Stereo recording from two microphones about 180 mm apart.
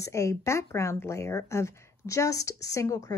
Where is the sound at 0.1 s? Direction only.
15° left (ahead or behind).